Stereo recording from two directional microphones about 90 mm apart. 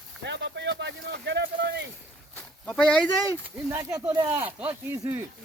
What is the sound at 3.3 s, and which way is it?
Speech, 30° right (ahead or behind).